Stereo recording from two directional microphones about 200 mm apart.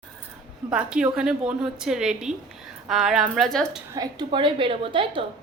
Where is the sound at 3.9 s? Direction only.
20° right (ahead or behind).